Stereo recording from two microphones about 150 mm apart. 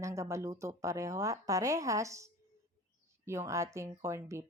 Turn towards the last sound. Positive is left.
turn(degrees=-20)  # may be behind; listen again after turning